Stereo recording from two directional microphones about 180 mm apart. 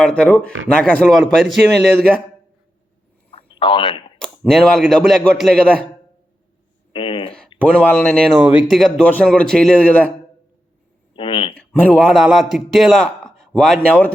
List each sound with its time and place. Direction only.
0.0 s a man's voice: 5° left (ahead or behind)
3.3 s a sound: 30° left (ahead or behind)
4.2 s a man's voice: centre (ahead or behind)
6.9 s speech: 30° left (ahead or behind)
7.6 s speech: 5° left (ahead or behind)
8.4 s a man's voice: centre (ahead or behind)
11.1 s a sound: 30° left (ahead or behind)
11.5 s a man's voice: 10° left (ahead or behind)